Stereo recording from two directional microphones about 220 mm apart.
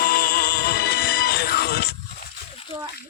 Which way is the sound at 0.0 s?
40° left (ahead or behind).